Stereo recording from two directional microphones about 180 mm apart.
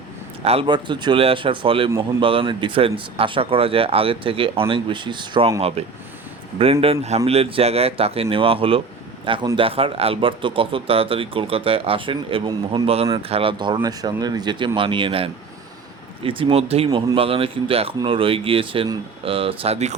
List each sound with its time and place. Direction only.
0.4 s speech: 30° right (ahead or behind)
6.8 s speech: 35° right (ahead or behind)